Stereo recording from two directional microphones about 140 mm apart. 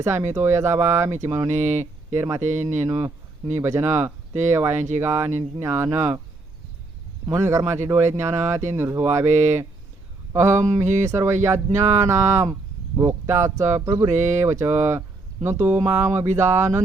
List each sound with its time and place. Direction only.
0.0 s speech: 20° right (ahead or behind)
1.5 s speech: 55° right (ahead or behind)
2.1 s speech: 20° right (ahead or behind)
2.4 s speech: 60° right (ahead or behind)
2.7 s speech: 20° right (ahead or behind)
7.3 s speech: 20° right (ahead or behind)
10.3 s speech: 20° right (ahead or behind)